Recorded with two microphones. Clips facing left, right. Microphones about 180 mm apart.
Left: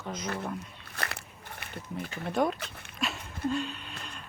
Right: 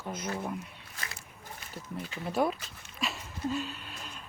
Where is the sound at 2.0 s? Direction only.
55° left (ahead or behind).